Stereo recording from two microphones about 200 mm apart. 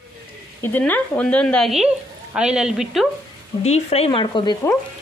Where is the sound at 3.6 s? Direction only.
30° left (ahead or behind).